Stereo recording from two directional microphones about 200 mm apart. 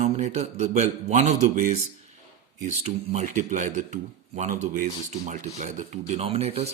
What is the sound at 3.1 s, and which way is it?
Speech, 35° right (ahead or behind).